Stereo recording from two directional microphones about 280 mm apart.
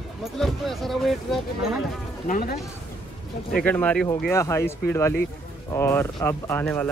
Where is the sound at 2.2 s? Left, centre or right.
Left.